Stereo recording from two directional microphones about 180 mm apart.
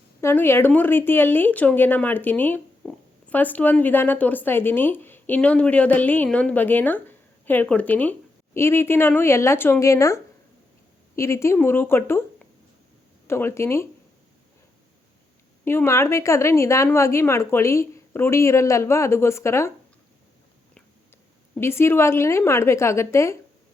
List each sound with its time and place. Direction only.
0.2 s speech: 15° left (ahead or behind)
11.2 s speech: 15° left (ahead or behind)
15.6 s speech: 15° left (ahead or behind)
21.6 s speech: 15° left (ahead or behind)